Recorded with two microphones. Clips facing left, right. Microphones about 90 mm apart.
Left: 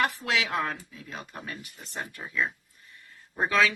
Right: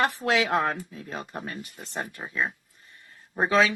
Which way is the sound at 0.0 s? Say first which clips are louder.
Right 4 dB; 35° right (ahead or behind).